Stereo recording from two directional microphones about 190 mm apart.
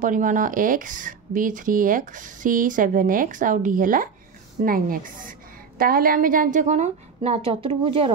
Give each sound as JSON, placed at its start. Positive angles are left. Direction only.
{"t": 0.0, "sound": "speech", "side_deg": -45}